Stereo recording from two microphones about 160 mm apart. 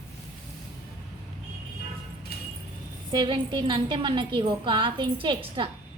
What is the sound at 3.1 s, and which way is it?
A woman's voice, 30° right (ahead or behind).